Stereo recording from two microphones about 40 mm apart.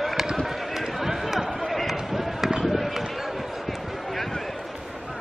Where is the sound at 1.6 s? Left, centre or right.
Centre.